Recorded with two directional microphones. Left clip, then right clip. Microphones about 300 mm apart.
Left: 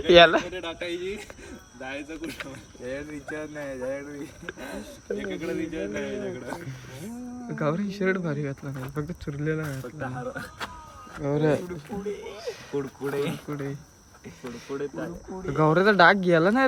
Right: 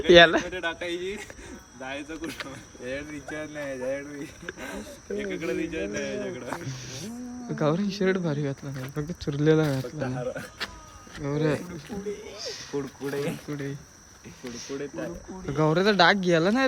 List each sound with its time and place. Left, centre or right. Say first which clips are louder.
0.0 s speech: even; centre
10.0 s speech: right 2 dB; centre
11.2 s speech: left 3 dB; centre
12.7 s speech: left 2 dB; left
13.1 s speech: left 1 dB; centre
14.8 s speech: left 2 dB; centre
15.4 s speech: left 2 dB; centre